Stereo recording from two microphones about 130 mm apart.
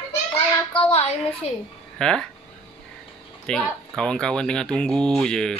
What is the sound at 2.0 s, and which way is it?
Speech, 5° left (ahead or behind).